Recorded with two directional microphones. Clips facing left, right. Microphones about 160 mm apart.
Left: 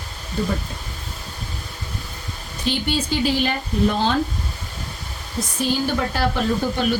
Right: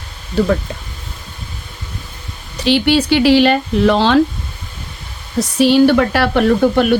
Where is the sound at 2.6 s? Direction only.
80° right.